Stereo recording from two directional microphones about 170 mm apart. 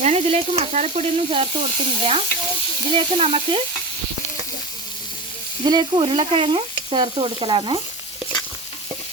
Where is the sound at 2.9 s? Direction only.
35° right (ahead or behind).